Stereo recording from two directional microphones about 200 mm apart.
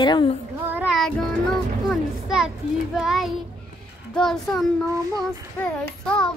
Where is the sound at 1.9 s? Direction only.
5° right (ahead or behind).